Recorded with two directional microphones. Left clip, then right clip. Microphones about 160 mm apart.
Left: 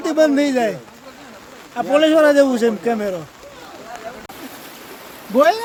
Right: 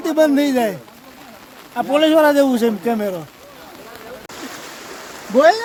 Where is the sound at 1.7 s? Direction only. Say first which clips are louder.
Even; 30° right (ahead or behind).